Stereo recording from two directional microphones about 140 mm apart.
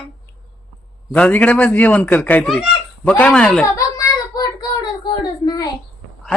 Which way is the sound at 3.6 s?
25° left (ahead or behind).